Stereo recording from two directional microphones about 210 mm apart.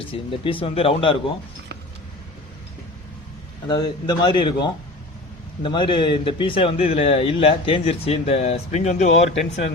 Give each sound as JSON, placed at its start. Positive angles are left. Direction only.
{"t": 0.1, "sound": "a man's voice", "side_deg": 25}
{"t": 3.7, "sound": "a man's voice", "side_deg": 20}